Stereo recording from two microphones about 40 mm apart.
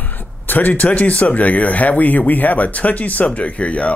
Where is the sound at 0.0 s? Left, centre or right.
Left.